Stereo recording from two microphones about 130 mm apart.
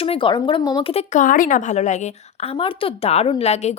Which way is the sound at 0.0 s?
45° left (ahead or behind).